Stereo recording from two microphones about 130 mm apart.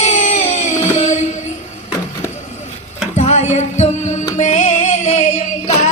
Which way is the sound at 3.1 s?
60° left (ahead or behind).